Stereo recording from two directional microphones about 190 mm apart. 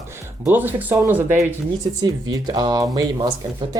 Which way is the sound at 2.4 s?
20° right (ahead or behind).